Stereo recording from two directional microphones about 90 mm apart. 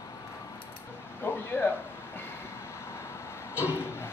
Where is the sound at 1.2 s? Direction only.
25° left (ahead or behind).